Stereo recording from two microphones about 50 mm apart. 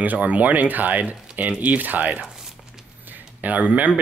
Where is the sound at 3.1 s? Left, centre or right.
Right.